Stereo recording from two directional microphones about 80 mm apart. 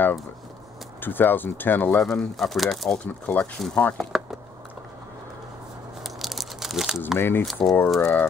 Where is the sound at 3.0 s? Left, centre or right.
Centre.